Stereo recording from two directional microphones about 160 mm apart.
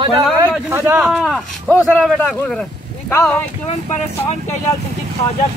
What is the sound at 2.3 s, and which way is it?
Speech, 10° left (ahead or behind).